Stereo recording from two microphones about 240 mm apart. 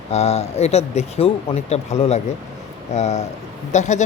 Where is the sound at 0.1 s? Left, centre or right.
Left.